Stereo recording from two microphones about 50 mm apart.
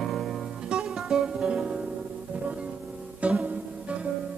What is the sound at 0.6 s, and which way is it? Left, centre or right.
Music, centre.